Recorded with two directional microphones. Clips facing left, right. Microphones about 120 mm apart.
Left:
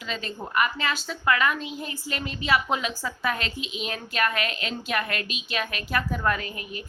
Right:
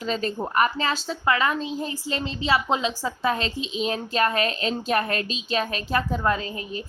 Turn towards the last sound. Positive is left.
turn(degrees=-30)  # may be behind; listen again after turning